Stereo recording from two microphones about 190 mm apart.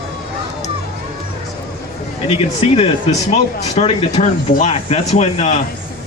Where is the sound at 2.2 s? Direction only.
30° left (ahead or behind).